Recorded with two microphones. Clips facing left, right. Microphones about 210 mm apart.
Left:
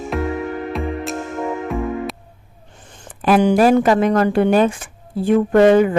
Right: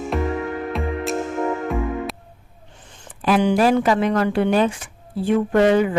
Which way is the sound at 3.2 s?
50° left (ahead or behind).